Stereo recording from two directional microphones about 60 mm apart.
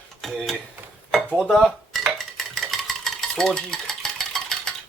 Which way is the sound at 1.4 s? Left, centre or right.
Centre.